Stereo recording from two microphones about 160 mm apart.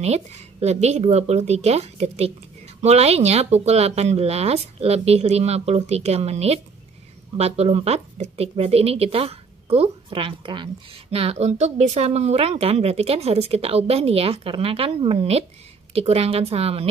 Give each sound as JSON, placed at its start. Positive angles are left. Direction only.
{"t": 0.0, "sound": "speech", "side_deg": -40}